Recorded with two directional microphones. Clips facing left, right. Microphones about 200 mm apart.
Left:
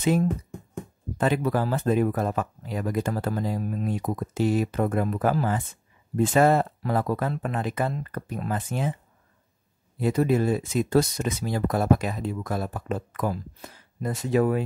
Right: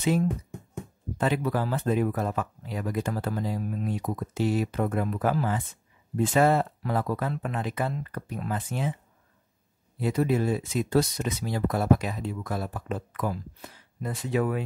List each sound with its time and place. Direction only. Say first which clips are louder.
0.0 s speech: left 2 dB; 45° left (ahead or behind)
9.9 s speech: left 3 dB; 45° left (ahead or behind)